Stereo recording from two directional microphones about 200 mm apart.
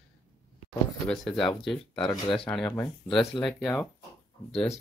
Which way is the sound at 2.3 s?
5° left (ahead or behind).